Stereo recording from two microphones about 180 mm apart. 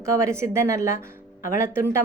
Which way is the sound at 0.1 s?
15° right (ahead or behind).